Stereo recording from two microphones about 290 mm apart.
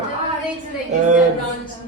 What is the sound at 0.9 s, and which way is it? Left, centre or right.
Speech, right.